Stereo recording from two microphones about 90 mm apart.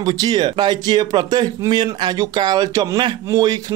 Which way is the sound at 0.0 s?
45° right (ahead or behind).